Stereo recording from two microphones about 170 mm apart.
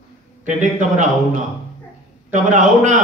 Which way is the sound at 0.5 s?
45° right (ahead or behind).